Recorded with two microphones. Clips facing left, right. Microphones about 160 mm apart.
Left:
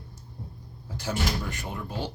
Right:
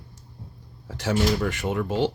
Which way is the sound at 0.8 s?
80° right.